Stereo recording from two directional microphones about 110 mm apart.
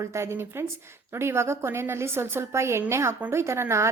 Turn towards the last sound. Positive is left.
turn(degrees=-25)  # may be behind; listen again after turning